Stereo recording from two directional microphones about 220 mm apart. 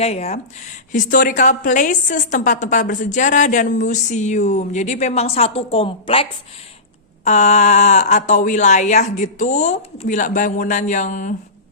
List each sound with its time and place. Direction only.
0.0 s a woman's voice: 30° left (ahead or behind)
7.3 s a woman's voice: 30° left (ahead or behind)